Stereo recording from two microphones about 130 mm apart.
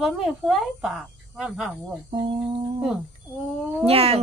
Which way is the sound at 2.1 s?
35° right (ahead or behind).